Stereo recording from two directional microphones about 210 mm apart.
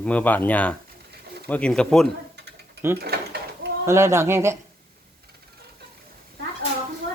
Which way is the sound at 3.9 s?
10° right (ahead or behind).